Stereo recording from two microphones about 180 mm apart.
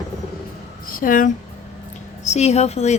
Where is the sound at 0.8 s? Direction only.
50° left (ahead or behind).